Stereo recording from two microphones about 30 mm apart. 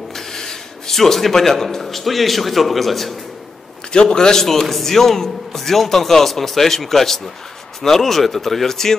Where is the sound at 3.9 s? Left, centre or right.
Left.